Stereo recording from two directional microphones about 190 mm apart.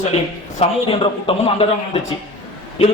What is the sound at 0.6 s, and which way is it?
A man's voice, 30° left (ahead or behind).